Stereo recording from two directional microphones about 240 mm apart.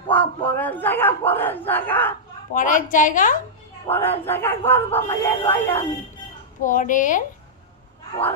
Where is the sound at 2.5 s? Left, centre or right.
Left.